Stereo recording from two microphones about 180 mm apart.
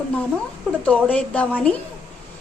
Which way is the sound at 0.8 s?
5° left (ahead or behind).